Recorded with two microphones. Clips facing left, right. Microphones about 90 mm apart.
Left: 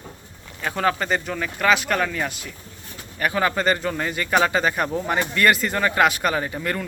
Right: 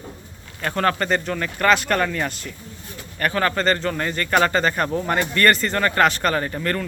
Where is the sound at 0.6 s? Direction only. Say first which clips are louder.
Right 1 dB; 5° left (ahead or behind).